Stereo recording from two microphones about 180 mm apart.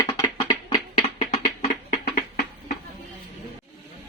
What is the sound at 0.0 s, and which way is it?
Music, 20° left (ahead or behind).